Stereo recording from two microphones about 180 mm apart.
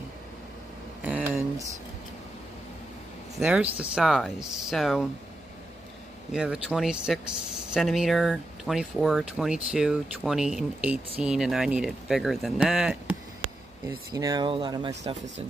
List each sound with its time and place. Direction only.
1.0 s a sound: 10° right (ahead or behind)
3.3 s speech: 5° right (ahead or behind)
6.3 s speech: 5° right (ahead or behind)
13.8 s speech: 20° right (ahead or behind)